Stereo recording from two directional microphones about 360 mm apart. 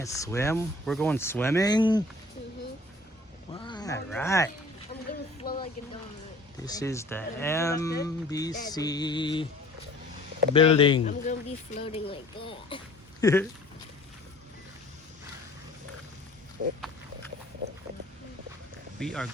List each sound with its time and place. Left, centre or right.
0.0 s speech: centre
3.6 s a sound: centre
6.7 s speech: centre
10.5 s speech: centre
16.6 s pig: right
18.9 s speech: centre